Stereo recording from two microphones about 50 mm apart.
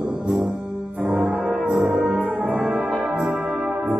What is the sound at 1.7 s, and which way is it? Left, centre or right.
Brass instrument, centre.